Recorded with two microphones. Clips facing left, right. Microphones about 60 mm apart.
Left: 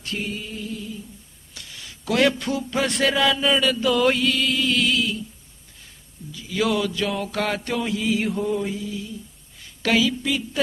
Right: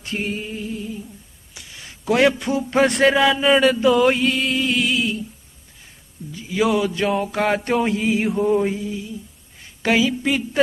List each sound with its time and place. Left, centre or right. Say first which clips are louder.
0.2 s mantra: right 4 dB; right
1.5 s a sound: even; centre
1.9 s speech: right 3 dB; right
2.7 s mantra: right 7 dB; right
4.2 s music: right 2 dB; right
6.5 s mantra: right 3 dB; centre
6.9 s mantra: right 5 dB; right
10.2 s mantra: right 4 dB; right